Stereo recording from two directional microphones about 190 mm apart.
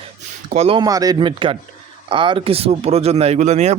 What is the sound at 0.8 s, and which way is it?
Speech, 20° right (ahead or behind).